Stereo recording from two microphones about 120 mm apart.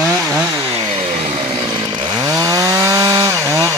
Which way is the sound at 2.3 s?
30° right (ahead or behind).